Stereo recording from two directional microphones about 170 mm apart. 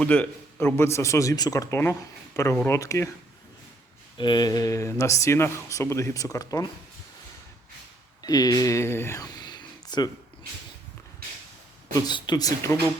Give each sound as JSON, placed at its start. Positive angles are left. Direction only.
{"t": 0.0, "sound": "speech", "side_deg": 10}
{"t": 4.2, "sound": "speech", "side_deg": 25}
{"t": 8.2, "sound": "speech", "side_deg": 20}
{"t": 11.9, "sound": "speech", "side_deg": 25}